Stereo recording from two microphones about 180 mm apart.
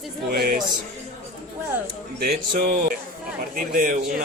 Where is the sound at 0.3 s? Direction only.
55° right (ahead or behind).